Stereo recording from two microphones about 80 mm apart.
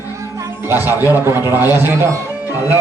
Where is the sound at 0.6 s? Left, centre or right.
Right.